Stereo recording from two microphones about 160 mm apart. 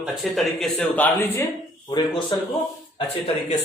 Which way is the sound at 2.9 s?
40° left (ahead or behind).